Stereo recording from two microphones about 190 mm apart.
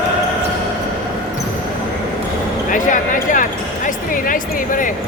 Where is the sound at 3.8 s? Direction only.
45° left (ahead or behind).